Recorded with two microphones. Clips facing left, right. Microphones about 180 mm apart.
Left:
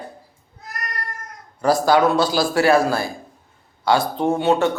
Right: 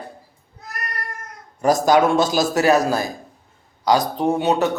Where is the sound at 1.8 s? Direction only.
25° right (ahead or behind).